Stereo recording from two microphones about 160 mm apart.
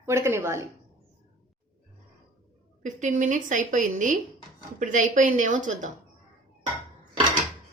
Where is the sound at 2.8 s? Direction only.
50° right (ahead or behind).